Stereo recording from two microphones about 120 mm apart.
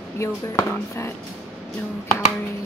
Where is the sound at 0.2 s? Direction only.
20° left (ahead or behind).